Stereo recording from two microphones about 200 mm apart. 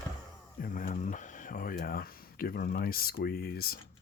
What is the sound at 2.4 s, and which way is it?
Speech, 50° left (ahead or behind).